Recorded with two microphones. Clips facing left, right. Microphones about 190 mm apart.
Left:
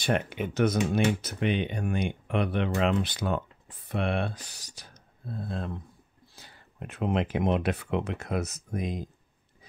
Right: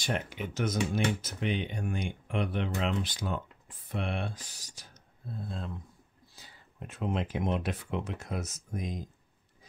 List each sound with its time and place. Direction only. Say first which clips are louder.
0.0 s speech: left 6 dB; 60° left (ahead or behind)